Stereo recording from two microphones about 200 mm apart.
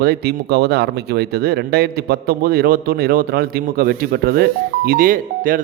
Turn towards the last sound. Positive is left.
turn(degrees=-45)  # may be behind; listen again after turning